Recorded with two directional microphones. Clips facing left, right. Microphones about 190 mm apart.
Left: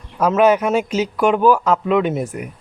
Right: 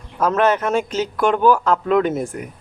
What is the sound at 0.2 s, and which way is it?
A man's voice, 10° left (ahead or behind).